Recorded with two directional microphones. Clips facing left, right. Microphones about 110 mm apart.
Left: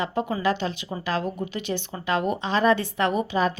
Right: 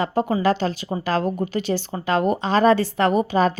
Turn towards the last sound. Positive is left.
turn(degrees=-40)  # may be behind; listen again after turning